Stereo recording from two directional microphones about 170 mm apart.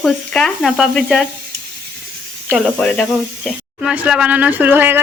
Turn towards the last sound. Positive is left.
turn(degrees=-10)  # may be behind; listen again after turning